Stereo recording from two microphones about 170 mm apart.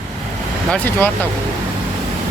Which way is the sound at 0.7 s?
10° left (ahead or behind).